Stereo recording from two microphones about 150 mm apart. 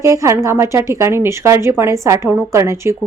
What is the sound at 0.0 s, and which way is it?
A woman's voice, 20° right (ahead or behind).